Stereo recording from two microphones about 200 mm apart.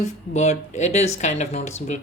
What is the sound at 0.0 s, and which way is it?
Speech, 35° left (ahead or behind).